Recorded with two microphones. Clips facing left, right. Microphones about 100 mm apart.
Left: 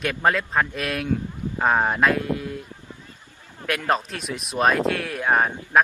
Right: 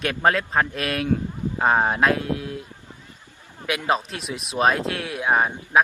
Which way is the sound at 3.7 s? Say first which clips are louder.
Even; 5° right (ahead or behind).